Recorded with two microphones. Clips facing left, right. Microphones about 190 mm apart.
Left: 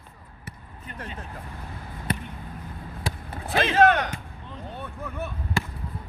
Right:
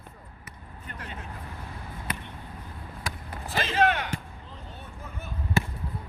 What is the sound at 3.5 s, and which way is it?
Speech, 65° left (ahead or behind).